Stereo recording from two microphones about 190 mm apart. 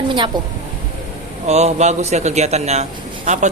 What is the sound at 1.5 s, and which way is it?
A man's voice, 35° right (ahead or behind).